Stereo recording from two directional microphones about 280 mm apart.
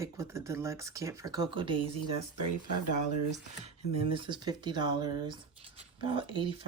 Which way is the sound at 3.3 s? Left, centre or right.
Right.